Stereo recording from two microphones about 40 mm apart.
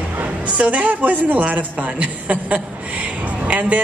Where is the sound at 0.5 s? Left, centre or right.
Right.